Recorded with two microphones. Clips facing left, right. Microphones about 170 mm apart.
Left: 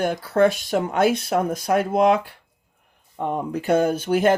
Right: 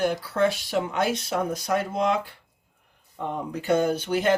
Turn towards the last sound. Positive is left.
turn(degrees=50)  # may be behind; listen again after turning